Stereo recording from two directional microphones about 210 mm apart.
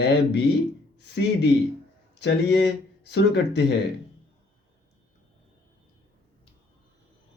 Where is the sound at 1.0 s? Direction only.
55° left (ahead or behind).